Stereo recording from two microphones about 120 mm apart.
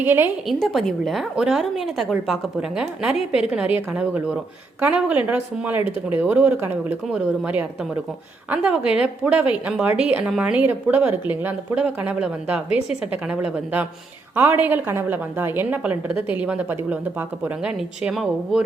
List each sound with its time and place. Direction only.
0.0 s a woman's voice: 15° right (ahead or behind)
0.4 s a woman's voice: centre (ahead or behind)